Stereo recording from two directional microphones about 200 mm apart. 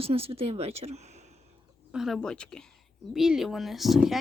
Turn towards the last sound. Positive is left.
turn(degrees=0)  # may be behind; listen again after turning